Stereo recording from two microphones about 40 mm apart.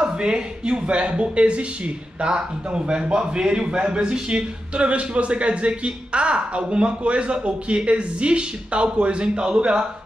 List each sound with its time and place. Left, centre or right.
0.0 s a man's voice: right